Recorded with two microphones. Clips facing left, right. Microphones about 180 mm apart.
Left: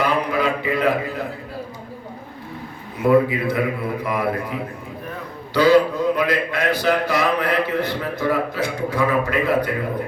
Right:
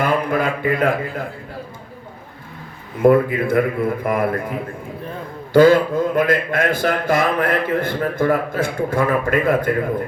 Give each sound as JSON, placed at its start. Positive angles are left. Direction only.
{"t": 0.0, "sound": "mantra", "side_deg": -50}
{"t": 3.0, "sound": "speech", "side_deg": -50}
{"t": 5.5, "sound": "speech", "side_deg": -50}